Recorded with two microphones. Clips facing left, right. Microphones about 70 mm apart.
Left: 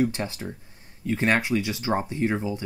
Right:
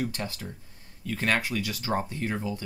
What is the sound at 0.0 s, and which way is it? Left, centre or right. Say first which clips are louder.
Speech: left 7 dB; left.